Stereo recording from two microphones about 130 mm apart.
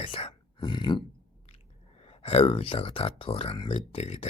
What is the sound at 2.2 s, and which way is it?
Speech, 50° left (ahead or behind).